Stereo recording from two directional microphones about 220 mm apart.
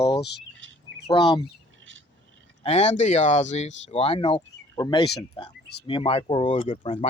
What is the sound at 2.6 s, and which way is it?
Speech, 30° left (ahead or behind).